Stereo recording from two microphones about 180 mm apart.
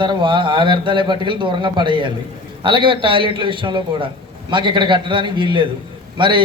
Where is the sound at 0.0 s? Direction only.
25° right (ahead or behind).